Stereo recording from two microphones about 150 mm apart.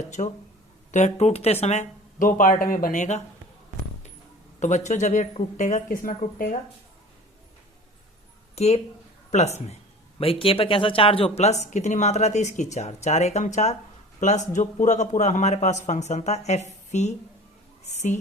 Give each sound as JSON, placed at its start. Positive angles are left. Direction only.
{"t": 0.2, "sound": "speech", "side_deg": 50}
{"t": 4.6, "sound": "speech", "side_deg": 55}
{"t": 8.5, "sound": "a woman's voice", "side_deg": 45}